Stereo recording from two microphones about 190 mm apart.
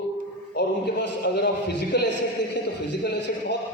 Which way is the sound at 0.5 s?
65° left (ahead or behind).